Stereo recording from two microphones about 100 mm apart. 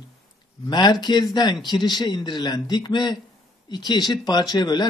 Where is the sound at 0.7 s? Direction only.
45° left (ahead or behind).